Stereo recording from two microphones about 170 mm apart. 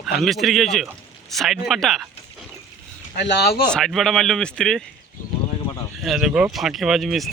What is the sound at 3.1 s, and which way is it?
Speech, 85° left.